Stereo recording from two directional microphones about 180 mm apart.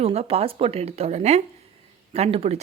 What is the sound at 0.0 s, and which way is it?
Speech, 35° right (ahead or behind).